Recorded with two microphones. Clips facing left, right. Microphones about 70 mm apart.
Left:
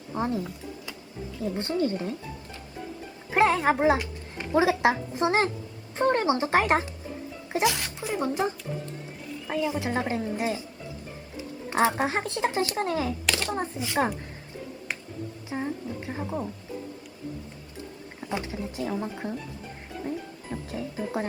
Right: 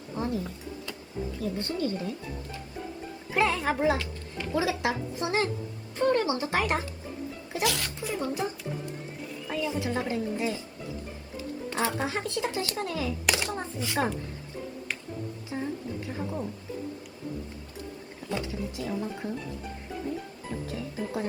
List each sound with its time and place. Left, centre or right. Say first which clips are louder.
0.2 s music: left 3 dB; left
1.4 s a woman's voice: left 5 dB; left
3.3 s a woman's voice: left 4 dB; left
13.2 s a sound: even; centre
13.5 s a woman's voice: left 3 dB; left
15.4 s speech: left 2 dB; left
18.2 s wild animals: left 2 dB; left
18.8 s a woman's voice: left 3 dB; left
20.7 s a woman's voice: left 4 dB; left